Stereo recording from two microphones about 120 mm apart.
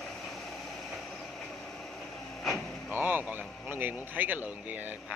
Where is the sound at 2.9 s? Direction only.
15° right (ahead or behind).